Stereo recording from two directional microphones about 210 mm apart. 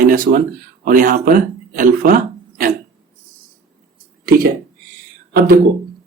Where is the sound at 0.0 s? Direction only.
40° right (ahead or behind).